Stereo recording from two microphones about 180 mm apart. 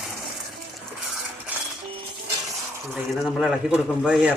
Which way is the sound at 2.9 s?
Centre (ahead or behind).